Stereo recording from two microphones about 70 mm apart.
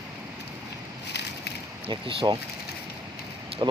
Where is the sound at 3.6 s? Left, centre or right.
Right.